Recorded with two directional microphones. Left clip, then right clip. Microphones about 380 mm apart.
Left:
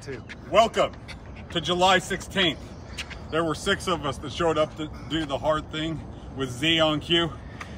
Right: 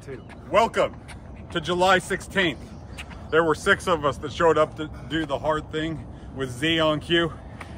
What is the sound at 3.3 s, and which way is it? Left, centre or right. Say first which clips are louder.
Speech: right 6 dB; centre.